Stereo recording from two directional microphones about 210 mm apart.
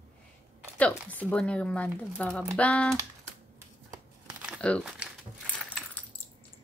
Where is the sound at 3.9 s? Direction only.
5° right (ahead or behind).